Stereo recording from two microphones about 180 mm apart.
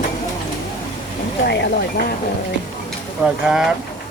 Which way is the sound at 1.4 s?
70° left (ahead or behind).